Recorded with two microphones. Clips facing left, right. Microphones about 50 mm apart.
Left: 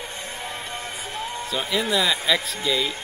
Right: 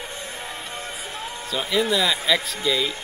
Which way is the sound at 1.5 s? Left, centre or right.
Centre.